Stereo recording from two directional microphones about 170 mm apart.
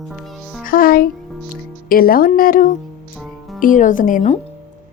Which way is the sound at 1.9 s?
60° left (ahead or behind).